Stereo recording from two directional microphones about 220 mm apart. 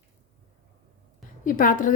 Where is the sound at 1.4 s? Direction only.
40° left (ahead or behind).